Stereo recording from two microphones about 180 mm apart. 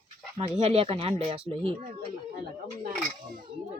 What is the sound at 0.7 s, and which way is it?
Speech, 35° right (ahead or behind).